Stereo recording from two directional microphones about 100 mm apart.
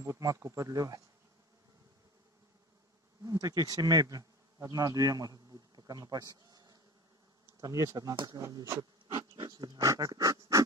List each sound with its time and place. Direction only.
0.0 s speech: 35° right (ahead or behind)
3.3 s speech: 35° right (ahead or behind)
9.4 s dog: 45° right (ahead or behind)